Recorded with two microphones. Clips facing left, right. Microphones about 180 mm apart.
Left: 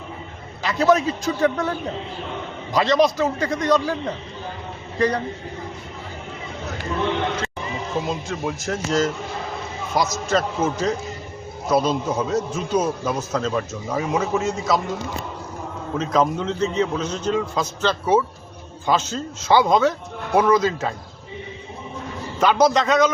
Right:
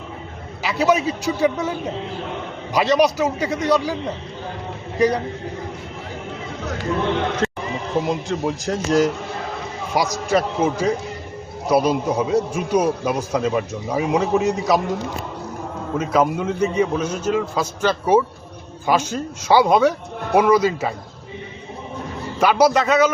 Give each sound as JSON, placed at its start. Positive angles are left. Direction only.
{"t": 0.6, "sound": "a sound", "side_deg": -5}
{"t": 1.0, "sound": "a man's voice", "side_deg": -10}
{"t": 2.7, "sound": "a man's voice", "side_deg": -10}
{"t": 4.9, "sound": "a man's voice", "side_deg": -10}
{"t": 7.4, "sound": "a sound", "side_deg": -60}
{"t": 8.0, "sound": "a man's voice", "side_deg": -15}
{"t": 16.0, "sound": "a man's voice", "side_deg": -10}
{"t": 22.4, "sound": "a man's voice", "side_deg": -10}